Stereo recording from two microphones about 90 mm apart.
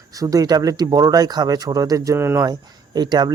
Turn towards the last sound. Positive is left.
turn(degrees=-55)  # may be behind; listen again after turning